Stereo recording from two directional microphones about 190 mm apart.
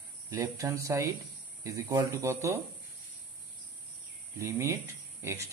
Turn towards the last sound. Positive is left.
turn(degrees=-15)  # may be behind; listen again after turning